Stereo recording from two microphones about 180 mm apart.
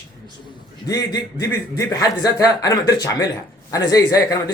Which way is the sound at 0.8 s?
20° left (ahead or behind).